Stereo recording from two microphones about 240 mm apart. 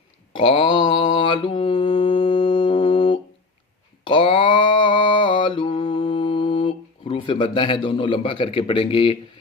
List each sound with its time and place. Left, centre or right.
0.3 s mantra: left